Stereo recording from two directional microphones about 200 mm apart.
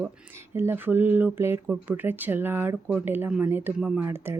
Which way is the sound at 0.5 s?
10° right (ahead or behind).